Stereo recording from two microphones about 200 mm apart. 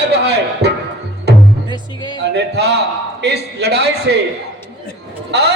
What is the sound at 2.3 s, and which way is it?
A man's voice, 55° right (ahead or behind).